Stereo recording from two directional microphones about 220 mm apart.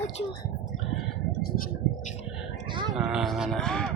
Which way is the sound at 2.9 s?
Centre (ahead or behind).